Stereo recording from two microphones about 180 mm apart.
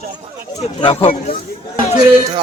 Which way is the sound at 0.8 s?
35° left (ahead or behind).